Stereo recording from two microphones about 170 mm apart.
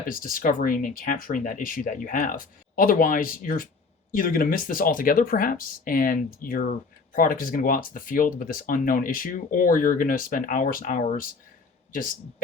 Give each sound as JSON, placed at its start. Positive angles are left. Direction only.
{"t": 0.1, "sound": "speech", "side_deg": 55}